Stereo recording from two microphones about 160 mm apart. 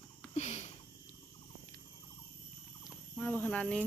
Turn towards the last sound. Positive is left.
turn(degrees=5)  # may be behind; listen again after turning